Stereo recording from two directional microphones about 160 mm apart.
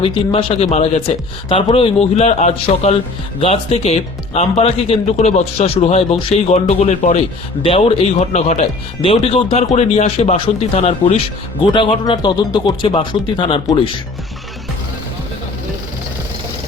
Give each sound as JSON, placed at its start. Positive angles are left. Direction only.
{"t": 0.0, "sound": "speech", "side_deg": 35}